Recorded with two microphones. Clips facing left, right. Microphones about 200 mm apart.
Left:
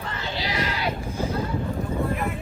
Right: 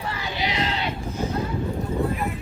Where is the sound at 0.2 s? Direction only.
20° right (ahead or behind).